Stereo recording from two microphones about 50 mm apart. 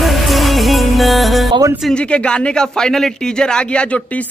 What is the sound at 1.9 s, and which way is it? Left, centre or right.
Speech, left.